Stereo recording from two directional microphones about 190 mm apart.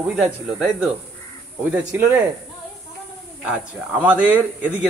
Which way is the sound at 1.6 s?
10° right (ahead or behind).